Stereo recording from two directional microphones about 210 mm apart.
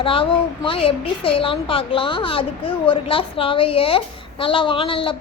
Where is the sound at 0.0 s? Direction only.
25° left (ahead or behind).